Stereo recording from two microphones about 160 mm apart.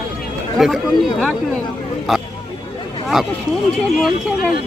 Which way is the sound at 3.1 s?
5° right (ahead or behind).